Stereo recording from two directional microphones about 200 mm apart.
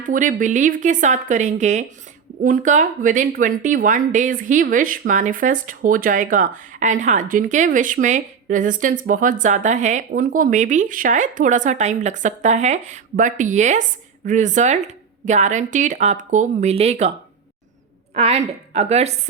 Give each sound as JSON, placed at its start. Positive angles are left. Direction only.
{"t": 0.0, "sound": "speech", "side_deg": -40}
{"t": 18.1, "sound": "speech", "side_deg": -35}